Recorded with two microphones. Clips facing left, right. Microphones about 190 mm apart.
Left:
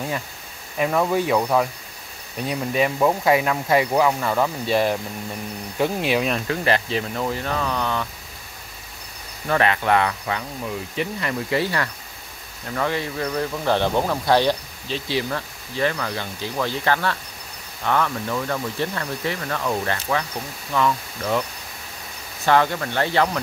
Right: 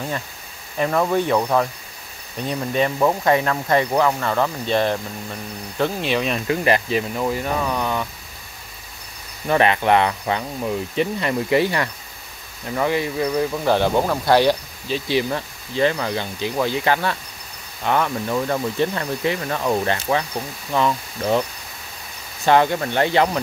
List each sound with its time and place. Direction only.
0.7 s speech: 5° left (ahead or behind)
6.4 s speech: 15° right (ahead or behind)
9.5 s speech: 20° right (ahead or behind)
22.5 s speech: 20° right (ahead or behind)